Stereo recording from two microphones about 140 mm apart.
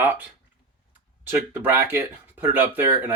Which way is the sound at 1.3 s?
15° right (ahead or behind).